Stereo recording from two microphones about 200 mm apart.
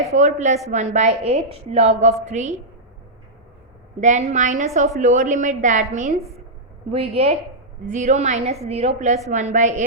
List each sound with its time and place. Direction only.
0.1 s a woman's voice: 35° right (ahead or behind)
4.0 s a woman's voice: 35° right (ahead or behind)